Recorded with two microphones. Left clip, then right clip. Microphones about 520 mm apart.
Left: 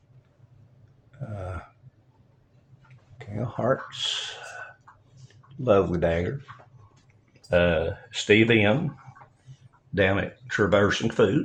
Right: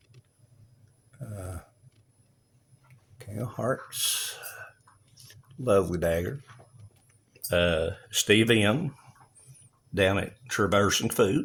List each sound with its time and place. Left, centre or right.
1.3 s a sound: right
3.2 s speech: right
5.6 s speech: right
7.5 s speech: right
9.9 s speech: right